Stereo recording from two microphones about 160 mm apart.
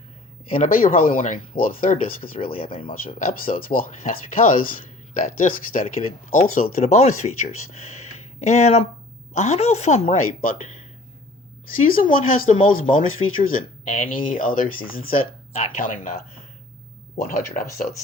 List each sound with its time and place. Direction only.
0.6 s speech: 60° left (ahead or behind)
2.6 s speech: 30° left (ahead or behind)
3.2 s speech: 60° left (ahead or behind)
6.8 s a woman's voice: 45° left (ahead or behind)
11.9 s speech: 60° left (ahead or behind)
17.2 s speech: 60° left (ahead or behind)